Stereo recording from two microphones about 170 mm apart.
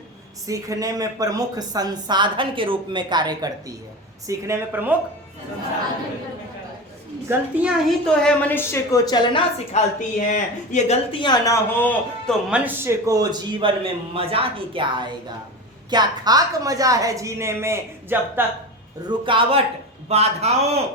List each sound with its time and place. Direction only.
0.4 s speech: 20° right (ahead or behind)
7.3 s speech: 5° right (ahead or behind)
8.0 s a woman's voice: 5° left (ahead or behind); by 9.4 s 25° left (ahead or behind)
9.7 s a woman's voice: 45° left (ahead or behind); by 12.3 s 10° left (ahead or behind)
12.5 s speech: 10° right (ahead or behind)
19.0 s a man's voice: 30° right (ahead or behind)